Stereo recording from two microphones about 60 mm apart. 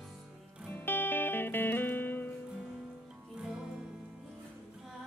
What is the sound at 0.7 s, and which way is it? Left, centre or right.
Music, left.